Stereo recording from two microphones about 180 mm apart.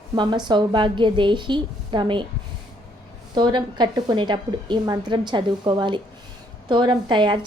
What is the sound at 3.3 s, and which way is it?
A woman's voice, 25° right (ahead or behind).